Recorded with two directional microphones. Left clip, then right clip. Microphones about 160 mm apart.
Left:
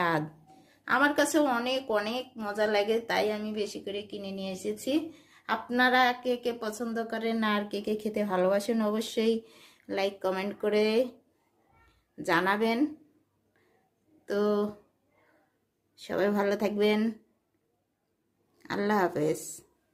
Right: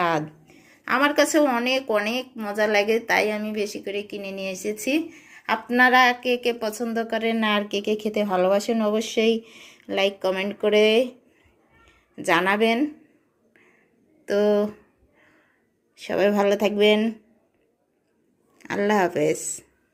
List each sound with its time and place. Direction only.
0.0 s a woman's voice: centre (ahead or behind)
12.1 s a woman's voice: 10° right (ahead or behind)
14.3 s a woman's voice: 15° right (ahead or behind)
16.0 s speech: 5° right (ahead or behind)
18.5 s a woman's voice: 5° right (ahead or behind)